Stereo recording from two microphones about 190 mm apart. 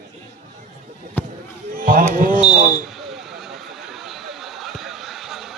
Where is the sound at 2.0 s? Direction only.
45° right (ahead or behind).